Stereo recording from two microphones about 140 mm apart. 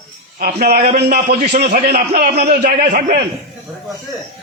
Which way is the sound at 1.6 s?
65° right (ahead or behind).